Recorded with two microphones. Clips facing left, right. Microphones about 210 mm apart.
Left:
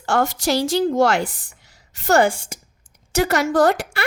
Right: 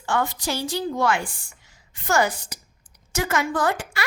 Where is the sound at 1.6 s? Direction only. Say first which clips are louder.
Left 6 dB; 75° left (ahead or behind).